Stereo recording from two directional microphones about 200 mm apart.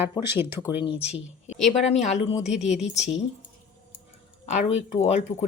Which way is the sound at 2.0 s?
35° left (ahead or behind).